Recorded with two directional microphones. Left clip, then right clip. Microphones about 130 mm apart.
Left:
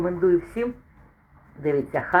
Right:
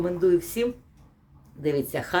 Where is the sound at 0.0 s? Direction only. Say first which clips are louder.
Left 1 dB; 25° right (ahead or behind).